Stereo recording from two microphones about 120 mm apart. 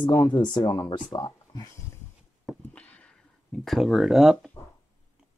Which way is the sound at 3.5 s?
Centre (ahead or behind).